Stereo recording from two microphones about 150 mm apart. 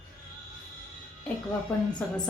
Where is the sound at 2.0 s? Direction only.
10° left (ahead or behind).